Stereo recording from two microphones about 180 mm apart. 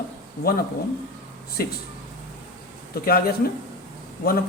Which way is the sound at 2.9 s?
55° left (ahead or behind).